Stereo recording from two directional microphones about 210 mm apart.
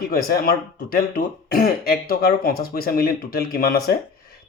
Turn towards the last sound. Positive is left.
turn(degrees=45)  # may be behind; listen again after turning